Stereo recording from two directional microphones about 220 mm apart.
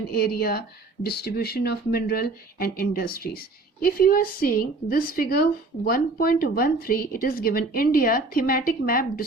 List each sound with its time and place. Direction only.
0.1 s speech: 45° left (ahead or behind)